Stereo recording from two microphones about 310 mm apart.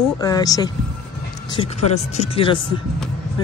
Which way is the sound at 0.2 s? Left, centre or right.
Centre.